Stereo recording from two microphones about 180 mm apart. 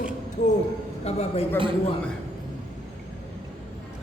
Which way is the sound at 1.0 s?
35° left (ahead or behind).